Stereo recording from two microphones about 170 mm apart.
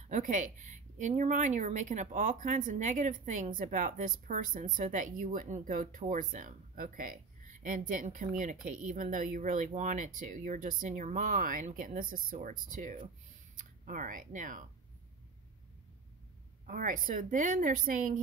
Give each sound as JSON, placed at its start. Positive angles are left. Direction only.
{"t": 0.1, "sound": "speech", "side_deg": -50}
{"t": 16.6, "sound": "speech", "side_deg": -55}